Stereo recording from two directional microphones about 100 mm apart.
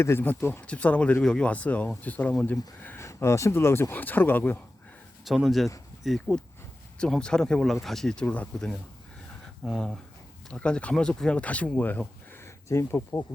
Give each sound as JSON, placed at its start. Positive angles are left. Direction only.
{"t": 0.0, "sound": "speech", "side_deg": 25}
{"t": 5.2, "sound": "speech", "side_deg": 0}
{"t": 12.6, "sound": "speech", "side_deg": 30}